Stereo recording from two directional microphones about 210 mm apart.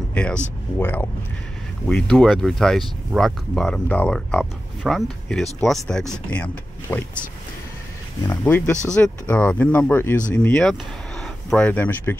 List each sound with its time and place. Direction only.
0.1 s speech: 5° left (ahead or behind)
8.3 s speech: 10° left (ahead or behind)